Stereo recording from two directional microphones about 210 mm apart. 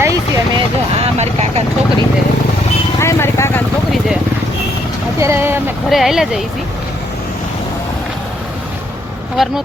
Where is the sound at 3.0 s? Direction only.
15° left (ahead or behind).